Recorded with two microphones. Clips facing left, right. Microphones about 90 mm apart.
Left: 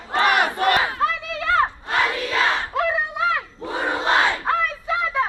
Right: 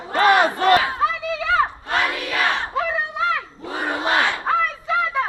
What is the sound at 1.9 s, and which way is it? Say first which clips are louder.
Crowd: even; 25° left (ahead or behind).